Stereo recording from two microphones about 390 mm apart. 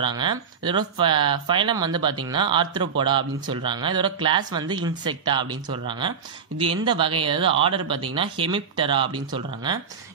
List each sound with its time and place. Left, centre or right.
0.0 s a man's voice: centre